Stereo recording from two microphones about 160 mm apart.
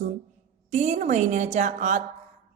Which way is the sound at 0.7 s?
50° right (ahead or behind).